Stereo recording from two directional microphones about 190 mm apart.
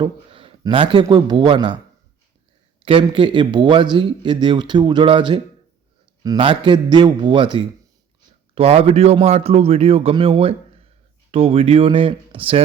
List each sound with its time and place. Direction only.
0.0 s a man's voice: 30° right (ahead or behind)
2.8 s a man's voice: 25° right (ahead or behind)